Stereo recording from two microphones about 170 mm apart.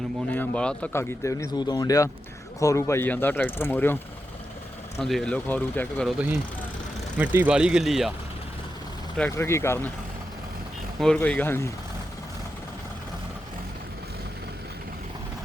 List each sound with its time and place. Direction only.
0.3 s a man's voice: 10° left (ahead or behind)
4.9 s speech: centre (ahead or behind)
6.1 s speech: 10° right (ahead or behind)
9.3 s a man's voice: 15° left (ahead or behind)
11.0 s a man's voice: 5° left (ahead or behind)